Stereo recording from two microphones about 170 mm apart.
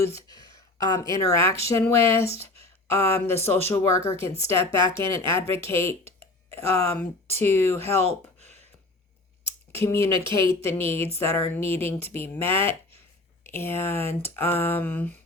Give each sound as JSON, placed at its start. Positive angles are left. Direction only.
{"t": 0.0, "sound": "speech", "side_deg": 20}
{"t": 8.0, "sound": "a sound", "side_deg": -40}
{"t": 9.8, "sound": "speech", "side_deg": 15}